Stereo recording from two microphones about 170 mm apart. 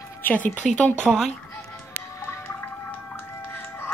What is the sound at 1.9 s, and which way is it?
Music, 15° left (ahead or behind).